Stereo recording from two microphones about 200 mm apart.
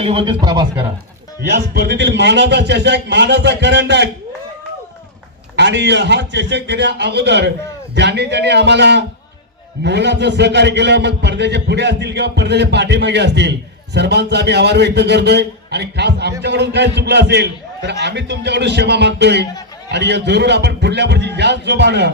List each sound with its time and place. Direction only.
0.0 s speech: 30° right (ahead or behind)
1.4 s a man's voice: 50° right (ahead or behind)
5.5 s a man's voice: 60° right (ahead or behind)